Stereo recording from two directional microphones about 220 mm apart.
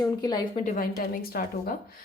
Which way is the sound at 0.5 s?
35° left (ahead or behind).